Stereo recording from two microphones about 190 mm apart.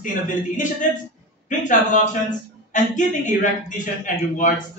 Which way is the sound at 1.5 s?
40° left (ahead or behind).